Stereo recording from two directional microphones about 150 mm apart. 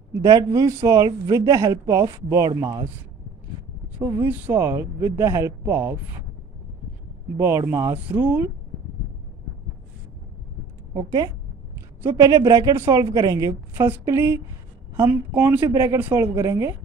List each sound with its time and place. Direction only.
0.2 s speech: 25° right (ahead or behind)
4.0 s speech: 15° right (ahead or behind)
7.3 s speech: 15° right (ahead or behind)
10.9 s a woman's voice: 25° right (ahead or behind)